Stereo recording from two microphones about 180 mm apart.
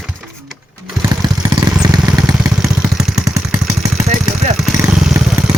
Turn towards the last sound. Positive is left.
turn(degrees=-5)  # may be behind; listen again after turning